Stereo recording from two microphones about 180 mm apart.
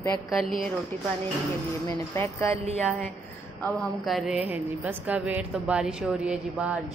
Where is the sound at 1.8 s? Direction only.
15° left (ahead or behind).